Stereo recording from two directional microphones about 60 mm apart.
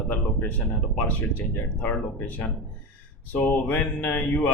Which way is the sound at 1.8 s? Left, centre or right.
Left.